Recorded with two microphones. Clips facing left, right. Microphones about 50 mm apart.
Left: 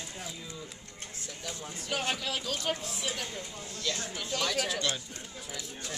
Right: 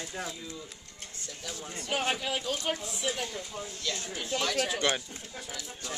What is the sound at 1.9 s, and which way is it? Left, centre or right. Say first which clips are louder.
Speech: right 2 dB; centre.